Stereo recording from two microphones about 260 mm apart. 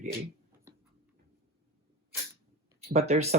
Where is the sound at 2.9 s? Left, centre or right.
Right.